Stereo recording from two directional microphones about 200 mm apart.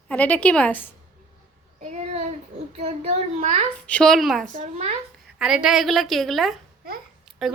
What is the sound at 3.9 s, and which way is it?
Speech, 5° left (ahead or behind).